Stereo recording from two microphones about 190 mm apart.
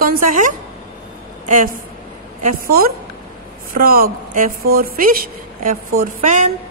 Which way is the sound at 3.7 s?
50° right (ahead or behind).